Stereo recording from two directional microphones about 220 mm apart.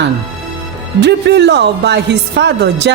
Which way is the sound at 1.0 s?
50° right (ahead or behind).